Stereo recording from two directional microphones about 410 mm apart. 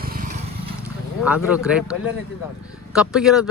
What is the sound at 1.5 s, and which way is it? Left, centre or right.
Speech, centre.